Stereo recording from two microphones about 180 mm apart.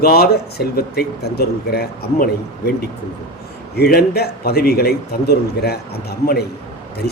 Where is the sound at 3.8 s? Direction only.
60° left (ahead or behind).